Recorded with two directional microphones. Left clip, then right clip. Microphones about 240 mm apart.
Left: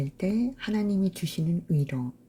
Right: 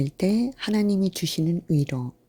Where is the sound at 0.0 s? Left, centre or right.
Right.